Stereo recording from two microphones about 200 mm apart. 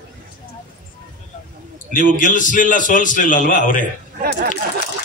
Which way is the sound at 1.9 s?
40° left (ahead or behind).